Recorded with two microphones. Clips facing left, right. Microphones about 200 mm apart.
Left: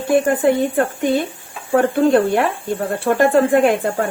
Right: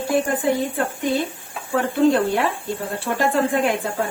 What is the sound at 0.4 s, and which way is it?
Speech, 55° left (ahead or behind).